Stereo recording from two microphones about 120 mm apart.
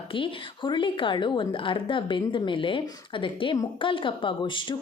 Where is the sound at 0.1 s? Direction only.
45° left (ahead or behind).